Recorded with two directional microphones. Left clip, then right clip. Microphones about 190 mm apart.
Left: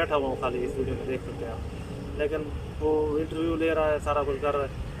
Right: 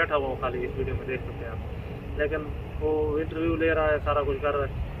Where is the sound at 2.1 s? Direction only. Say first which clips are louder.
Right 1 dB; 10° left (ahead or behind).